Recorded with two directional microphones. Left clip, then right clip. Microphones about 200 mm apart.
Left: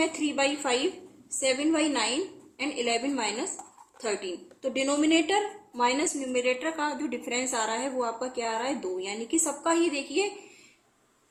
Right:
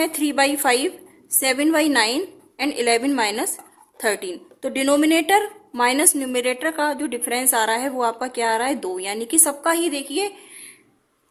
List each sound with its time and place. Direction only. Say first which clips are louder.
0.0 s a woman's voice: right 7 dB; 50° right (ahead or behind)